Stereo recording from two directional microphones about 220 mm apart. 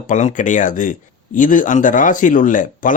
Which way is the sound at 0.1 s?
35° left (ahead or behind).